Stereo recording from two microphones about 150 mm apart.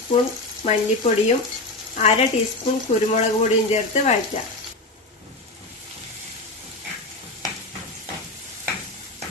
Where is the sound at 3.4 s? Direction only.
45° left (ahead or behind).